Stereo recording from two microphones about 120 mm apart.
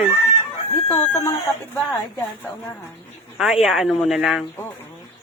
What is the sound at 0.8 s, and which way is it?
Speech, 25° left (ahead or behind).